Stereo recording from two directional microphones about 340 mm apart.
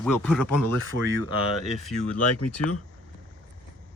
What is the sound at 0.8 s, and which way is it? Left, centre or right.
Speech, right.